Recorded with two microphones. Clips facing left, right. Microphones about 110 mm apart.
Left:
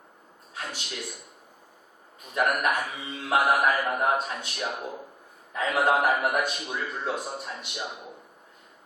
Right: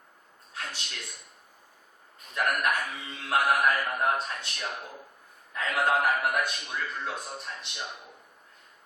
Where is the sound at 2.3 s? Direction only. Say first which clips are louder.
Left 3 dB; 20° left (ahead or behind).